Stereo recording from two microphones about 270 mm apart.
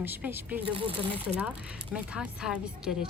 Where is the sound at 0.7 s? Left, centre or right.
Centre.